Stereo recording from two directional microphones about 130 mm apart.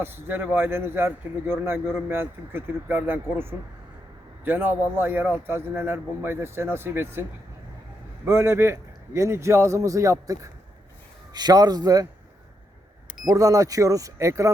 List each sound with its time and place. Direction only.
0.0 s a man's voice: 15° right (ahead or behind)
13.2 s a man's voice: 25° right (ahead or behind)